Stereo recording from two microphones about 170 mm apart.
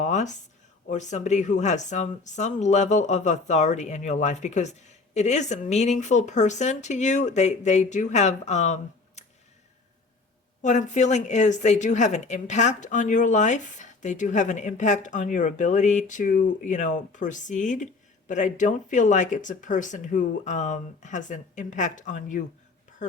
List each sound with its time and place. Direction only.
0.0 s a sound: 45° left (ahead or behind)
0.9 s speech: 45° left (ahead or behind)
10.6 s speech: 45° left (ahead or behind)